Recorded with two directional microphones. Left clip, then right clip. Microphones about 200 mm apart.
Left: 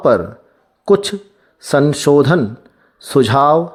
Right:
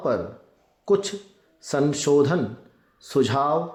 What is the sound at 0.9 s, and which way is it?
A man's voice, 40° left (ahead or behind).